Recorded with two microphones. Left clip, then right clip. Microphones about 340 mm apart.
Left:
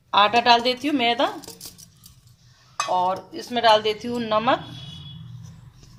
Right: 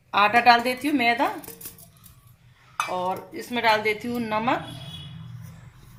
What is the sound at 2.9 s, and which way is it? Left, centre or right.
A woman's voice, left.